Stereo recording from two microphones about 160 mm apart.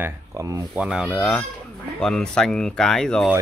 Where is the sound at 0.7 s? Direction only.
5° right (ahead or behind).